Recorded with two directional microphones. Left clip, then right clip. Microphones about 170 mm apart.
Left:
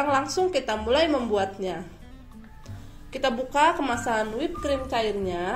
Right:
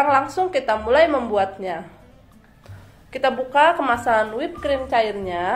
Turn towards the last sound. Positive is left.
turn(degrees=45)  # may be behind; listen again after turning